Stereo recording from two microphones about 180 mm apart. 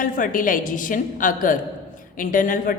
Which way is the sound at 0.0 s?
50° left (ahead or behind).